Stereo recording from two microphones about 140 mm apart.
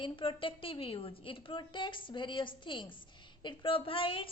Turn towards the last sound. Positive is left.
turn(degrees=40)  # may be behind; listen again after turning